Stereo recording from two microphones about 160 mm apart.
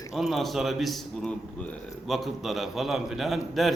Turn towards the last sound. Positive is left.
turn(degrees=0)  # may be behind; listen again after turning